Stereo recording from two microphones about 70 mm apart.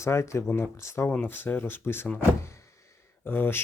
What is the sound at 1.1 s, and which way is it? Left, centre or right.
Speech, left.